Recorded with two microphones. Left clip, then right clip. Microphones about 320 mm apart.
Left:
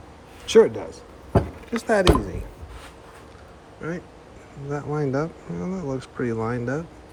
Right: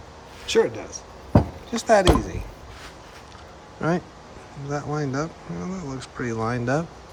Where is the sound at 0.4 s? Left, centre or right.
Centre.